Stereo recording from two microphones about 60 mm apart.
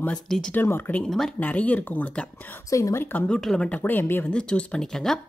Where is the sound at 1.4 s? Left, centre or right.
Left.